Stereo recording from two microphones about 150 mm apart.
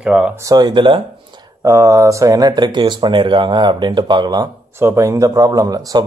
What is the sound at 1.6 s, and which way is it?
Speech, 20° right (ahead or behind).